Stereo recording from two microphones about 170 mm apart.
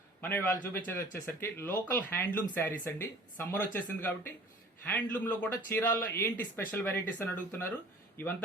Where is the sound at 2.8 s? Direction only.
15° left (ahead or behind).